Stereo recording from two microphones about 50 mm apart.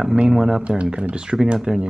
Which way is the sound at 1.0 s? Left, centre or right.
Centre.